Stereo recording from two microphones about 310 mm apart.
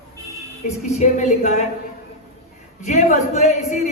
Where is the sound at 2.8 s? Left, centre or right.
Left.